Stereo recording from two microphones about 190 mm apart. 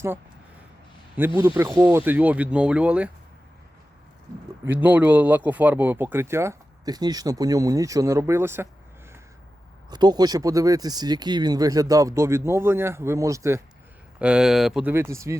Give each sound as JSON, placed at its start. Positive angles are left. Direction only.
{"t": 1.4, "sound": "speech", "side_deg": -15}
{"t": 4.6, "sound": "speech", "side_deg": -10}
{"t": 9.9, "sound": "speech", "side_deg": -20}
{"t": 14.2, "sound": "speech", "side_deg": -5}